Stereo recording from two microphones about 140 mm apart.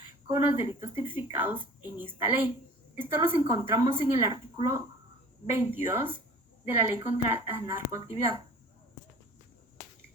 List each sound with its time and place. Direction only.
0.3 s a woman's voice: 15° right (ahead or behind)